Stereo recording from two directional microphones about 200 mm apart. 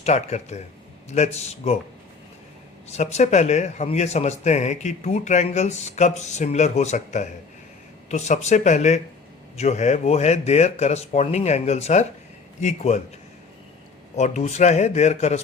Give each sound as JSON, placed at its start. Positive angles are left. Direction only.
{"t": 0.0, "sound": "a man's voice", "side_deg": 35}
{"t": 2.9, "sound": "a man's voice", "side_deg": 35}
{"t": 14.2, "sound": "a man's voice", "side_deg": 35}